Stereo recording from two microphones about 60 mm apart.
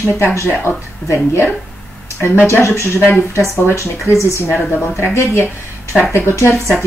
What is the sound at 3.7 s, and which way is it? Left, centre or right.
Speech, left.